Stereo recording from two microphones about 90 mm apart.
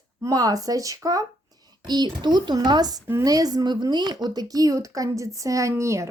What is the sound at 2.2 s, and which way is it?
Speech, 55° right (ahead or behind).